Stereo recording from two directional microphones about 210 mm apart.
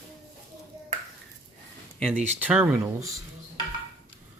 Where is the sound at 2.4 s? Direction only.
5° right (ahead or behind).